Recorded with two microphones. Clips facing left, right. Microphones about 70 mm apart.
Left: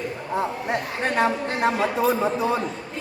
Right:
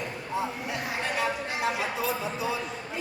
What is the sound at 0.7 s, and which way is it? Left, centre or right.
Speech, left.